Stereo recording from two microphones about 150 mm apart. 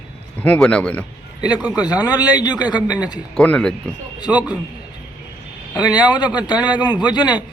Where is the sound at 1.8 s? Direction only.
25° left (ahead or behind).